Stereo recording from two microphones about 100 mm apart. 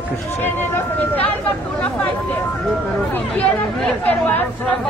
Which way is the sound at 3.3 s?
15° left (ahead or behind).